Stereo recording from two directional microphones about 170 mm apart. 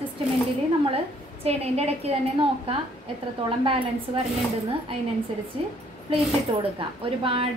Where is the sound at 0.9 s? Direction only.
35° right (ahead or behind).